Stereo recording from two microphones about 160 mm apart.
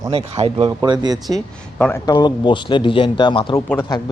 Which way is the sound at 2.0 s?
30° left (ahead or behind).